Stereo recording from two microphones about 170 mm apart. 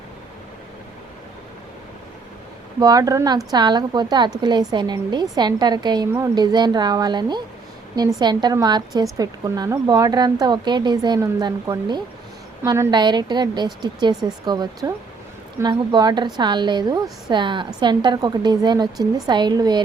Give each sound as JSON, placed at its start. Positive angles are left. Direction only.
{"t": 2.8, "sound": "speech", "side_deg": -20}